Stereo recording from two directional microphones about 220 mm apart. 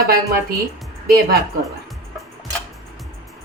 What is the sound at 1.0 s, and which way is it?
Speech, 45° right (ahead or behind).